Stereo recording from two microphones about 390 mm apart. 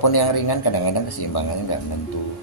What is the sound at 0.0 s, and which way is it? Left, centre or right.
Speech, left.